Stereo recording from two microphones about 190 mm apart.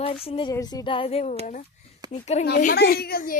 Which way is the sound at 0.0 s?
30° left (ahead or behind).